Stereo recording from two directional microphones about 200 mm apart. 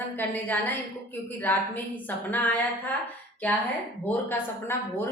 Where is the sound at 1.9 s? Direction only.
10° left (ahead or behind).